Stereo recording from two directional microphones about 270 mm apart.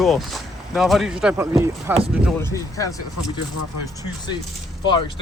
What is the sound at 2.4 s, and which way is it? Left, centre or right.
Speech, centre.